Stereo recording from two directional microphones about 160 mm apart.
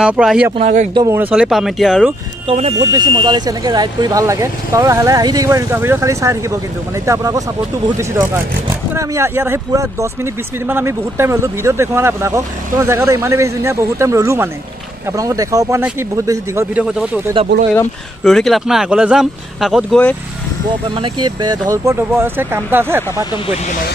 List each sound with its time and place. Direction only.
0.0 s speech: 5° right (ahead or behind)
0.6 s speech: 45° right (ahead or behind)
0.9 s speech: 15° right (ahead or behind)
1.3 s speech: 5° right (ahead or behind)
2.4 s speech: 40° right (ahead or behind)
2.9 s speech: 25° right (ahead or behind)
8.9 s speech: 15° right (ahead or behind)
17.4 s speech: 35° right (ahead or behind)
18.2 s speech: centre (ahead or behind)
20.9 s speech: 30° right (ahead or behind); by 23.2 s 15° right (ahead or behind)
23.3 s speech: 35° left (ahead or behind)